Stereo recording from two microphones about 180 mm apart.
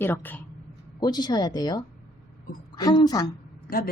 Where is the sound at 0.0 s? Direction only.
10° left (ahead or behind).